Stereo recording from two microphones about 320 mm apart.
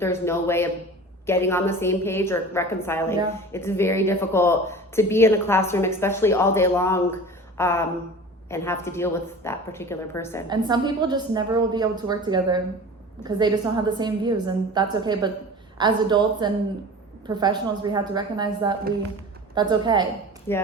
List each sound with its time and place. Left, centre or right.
0.0 s a woman's voice: centre
7.5 s a sound: centre
8.4 s a woman's voice: centre
10.5 s a woman's voice: centre
20.5 s a woman's voice: centre